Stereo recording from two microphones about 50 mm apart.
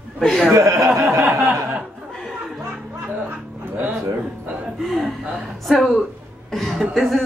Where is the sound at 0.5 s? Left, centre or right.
Right.